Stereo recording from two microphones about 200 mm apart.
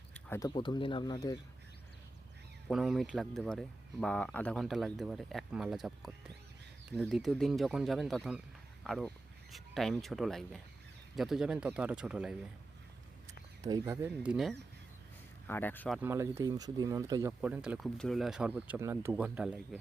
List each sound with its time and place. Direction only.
0.1 s speech: 15° left (ahead or behind)
2.6 s speech: centre (ahead or behind)
13.2 s speech: 20° right (ahead or behind)
15.4 s speech: 10° left (ahead or behind)
16.0 s speech: 10° right (ahead or behind)